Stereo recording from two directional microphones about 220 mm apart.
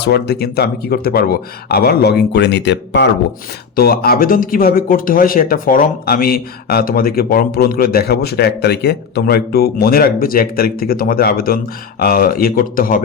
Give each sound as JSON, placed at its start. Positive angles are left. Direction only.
{"t": 0.0, "sound": "speech", "side_deg": 45}